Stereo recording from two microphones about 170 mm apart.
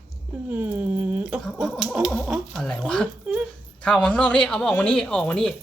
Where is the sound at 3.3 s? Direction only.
5° right (ahead or behind).